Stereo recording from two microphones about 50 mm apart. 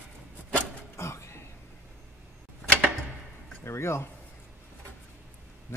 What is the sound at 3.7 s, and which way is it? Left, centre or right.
Speech, left.